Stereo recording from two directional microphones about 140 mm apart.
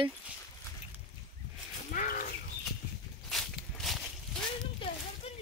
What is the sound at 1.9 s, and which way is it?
Livestock, 90° left.